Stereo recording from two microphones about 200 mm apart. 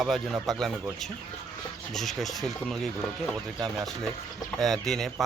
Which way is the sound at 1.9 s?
Centre (ahead or behind).